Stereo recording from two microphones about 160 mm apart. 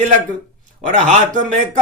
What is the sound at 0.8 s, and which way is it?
Speech, 45° right (ahead or behind).